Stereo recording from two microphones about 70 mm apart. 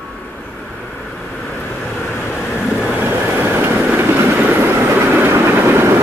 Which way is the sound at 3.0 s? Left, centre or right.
Right.